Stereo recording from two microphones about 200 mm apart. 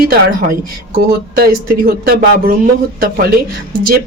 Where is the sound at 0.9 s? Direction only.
50° right (ahead or behind).